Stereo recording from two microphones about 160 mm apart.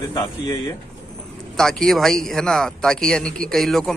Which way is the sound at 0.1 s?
25° left (ahead or behind).